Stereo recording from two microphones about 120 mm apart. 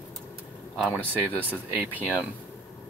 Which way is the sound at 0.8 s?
15° right (ahead or behind).